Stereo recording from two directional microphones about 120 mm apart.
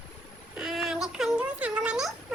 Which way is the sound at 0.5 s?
5° right (ahead or behind).